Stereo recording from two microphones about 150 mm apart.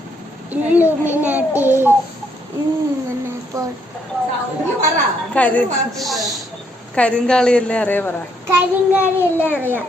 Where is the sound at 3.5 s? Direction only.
25° right (ahead or behind).